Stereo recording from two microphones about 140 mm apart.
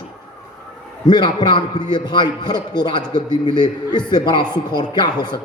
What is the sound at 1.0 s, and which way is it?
A man's voice, 30° left (ahead or behind).